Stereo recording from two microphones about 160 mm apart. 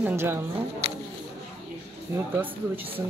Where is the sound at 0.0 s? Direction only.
15° right (ahead or behind).